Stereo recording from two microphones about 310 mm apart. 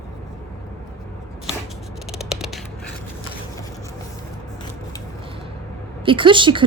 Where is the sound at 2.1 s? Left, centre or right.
Centre.